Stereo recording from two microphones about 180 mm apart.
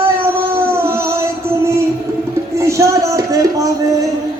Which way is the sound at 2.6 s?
15° right (ahead or behind).